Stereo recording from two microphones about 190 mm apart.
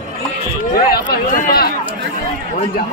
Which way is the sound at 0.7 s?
50° left (ahead or behind).